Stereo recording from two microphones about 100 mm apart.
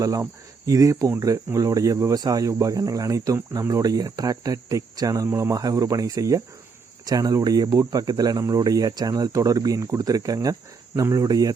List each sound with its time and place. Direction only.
0.0 s speech: 35° right (ahead or behind)